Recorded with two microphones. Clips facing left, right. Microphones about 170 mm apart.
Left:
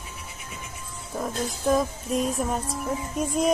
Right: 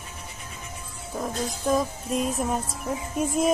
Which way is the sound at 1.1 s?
Centre (ahead or behind).